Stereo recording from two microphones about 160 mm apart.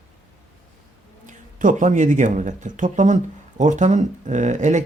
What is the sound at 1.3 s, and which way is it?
Speech, 55° right (ahead or behind).